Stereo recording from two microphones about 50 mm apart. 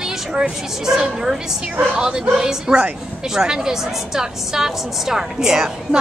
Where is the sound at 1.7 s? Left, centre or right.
Right.